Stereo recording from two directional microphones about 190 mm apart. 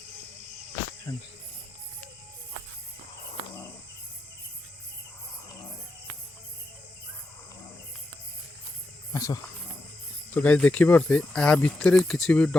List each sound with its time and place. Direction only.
1.1 s cricket: 15° left (ahead or behind)
9.1 s speech: 20° left (ahead or behind)
10.3 s speech: 5° left (ahead or behind)